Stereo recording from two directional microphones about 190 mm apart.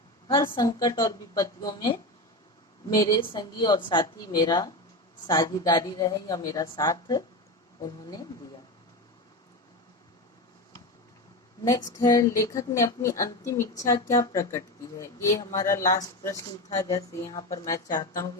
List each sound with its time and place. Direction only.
0.5 s a woman's voice: 20° left (ahead or behind)
11.6 s a woman's voice: 20° left (ahead or behind)